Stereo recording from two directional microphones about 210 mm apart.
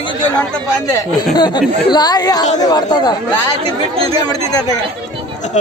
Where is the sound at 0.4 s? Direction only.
5° left (ahead or behind).